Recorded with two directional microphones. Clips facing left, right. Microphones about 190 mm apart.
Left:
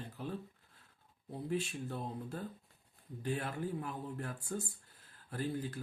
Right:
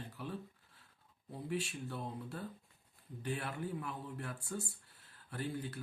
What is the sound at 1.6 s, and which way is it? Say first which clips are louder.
Speech: left 2 dB; 40° left (ahead or behind).